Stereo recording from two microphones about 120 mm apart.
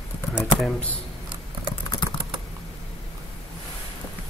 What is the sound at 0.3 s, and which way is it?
Speech, 5° right (ahead or behind).